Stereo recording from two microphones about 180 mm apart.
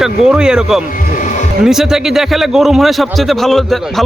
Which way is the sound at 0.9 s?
50° left (ahead or behind).